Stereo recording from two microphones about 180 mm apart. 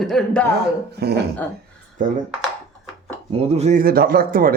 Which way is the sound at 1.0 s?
65° right (ahead or behind).